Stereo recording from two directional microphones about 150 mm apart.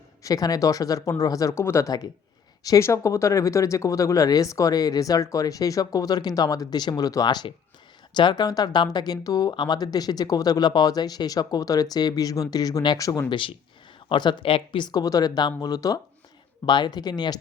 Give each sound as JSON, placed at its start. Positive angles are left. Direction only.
{"t": 0.2, "sound": "speech", "side_deg": 25}